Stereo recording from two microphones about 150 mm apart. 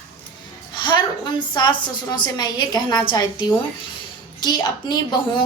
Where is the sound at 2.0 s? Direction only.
30° left (ahead or behind).